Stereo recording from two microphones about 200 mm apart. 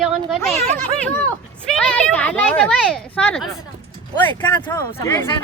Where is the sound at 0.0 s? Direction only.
Centre (ahead or behind).